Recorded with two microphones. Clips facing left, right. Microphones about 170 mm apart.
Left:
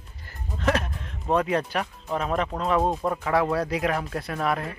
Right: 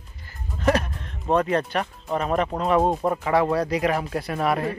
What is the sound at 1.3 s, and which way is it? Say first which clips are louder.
Speech: right 2 dB; 5° left (ahead or behind).